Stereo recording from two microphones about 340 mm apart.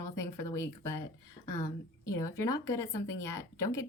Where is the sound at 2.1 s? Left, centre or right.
Centre.